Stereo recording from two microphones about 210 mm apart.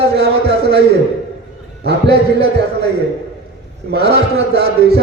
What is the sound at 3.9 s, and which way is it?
A man's voice, 50° right (ahead or behind).